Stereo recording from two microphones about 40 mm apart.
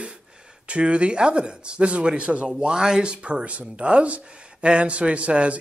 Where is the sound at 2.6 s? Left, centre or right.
Centre.